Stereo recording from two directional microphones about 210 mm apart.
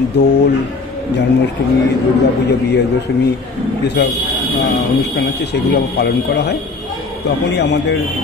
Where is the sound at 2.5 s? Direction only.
50° left (ahead or behind).